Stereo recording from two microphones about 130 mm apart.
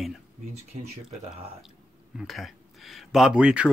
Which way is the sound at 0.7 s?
60° right (ahead or behind).